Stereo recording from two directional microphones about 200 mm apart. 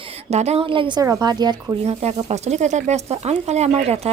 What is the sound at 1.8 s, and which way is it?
Speech, 35° right (ahead or behind).